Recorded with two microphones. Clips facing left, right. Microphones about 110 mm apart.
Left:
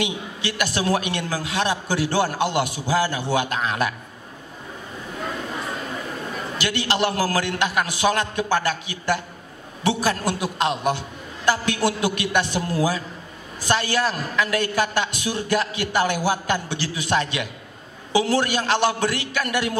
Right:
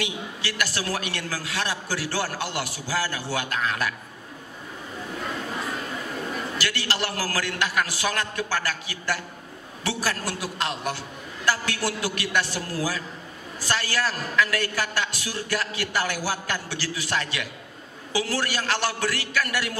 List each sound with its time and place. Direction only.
0.0 s a man's voice: 20° left (ahead or behind)
6.6 s a man's voice: 20° left (ahead or behind)